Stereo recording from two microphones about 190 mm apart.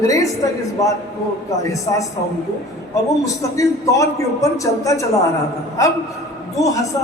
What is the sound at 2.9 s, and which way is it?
A man's voice, 15° left (ahead or behind).